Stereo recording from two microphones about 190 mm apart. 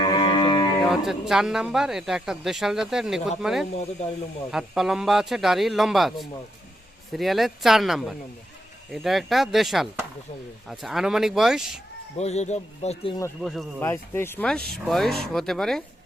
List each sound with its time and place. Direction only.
0.0 s music: 25° left (ahead or behind)
0.8 s speech: centre (ahead or behind)
12.1 s speech: 35° left (ahead or behind)
13.4 s speech: centre (ahead or behind)
13.8 s speech: 15° left (ahead or behind)